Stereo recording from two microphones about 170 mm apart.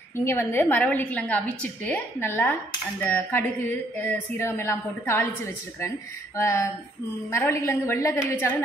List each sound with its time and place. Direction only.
0.1 s a woman's voice: 15° left (ahead or behind)